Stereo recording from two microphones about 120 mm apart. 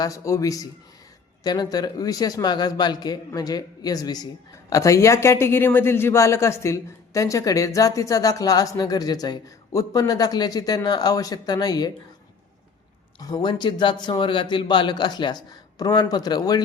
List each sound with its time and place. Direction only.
0.0 s a man's voice: 25° left (ahead or behind)
13.1 s a man's voice: 35° left (ahead or behind)